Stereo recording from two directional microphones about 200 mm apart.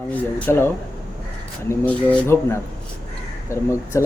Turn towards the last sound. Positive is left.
turn(degrees=15)  # may be behind; listen again after turning